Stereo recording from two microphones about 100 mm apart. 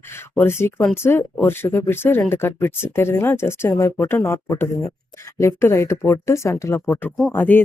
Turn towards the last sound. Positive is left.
turn(degrees=20)  # may be behind; listen again after turning